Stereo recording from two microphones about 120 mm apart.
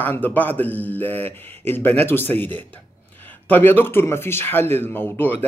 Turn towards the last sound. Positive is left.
turn(degrees=15)  # may be behind; listen again after turning